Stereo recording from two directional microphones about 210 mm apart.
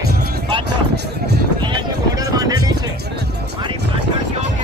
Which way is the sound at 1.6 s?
20° right (ahead or behind).